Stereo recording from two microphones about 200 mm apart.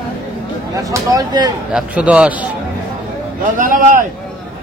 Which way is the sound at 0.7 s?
15° right (ahead or behind).